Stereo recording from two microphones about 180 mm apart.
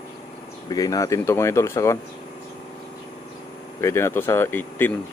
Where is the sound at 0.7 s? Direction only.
20° left (ahead or behind).